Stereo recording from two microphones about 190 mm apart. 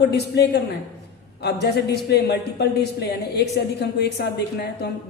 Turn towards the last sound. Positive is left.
turn(degrees=60)  # may be behind; listen again after turning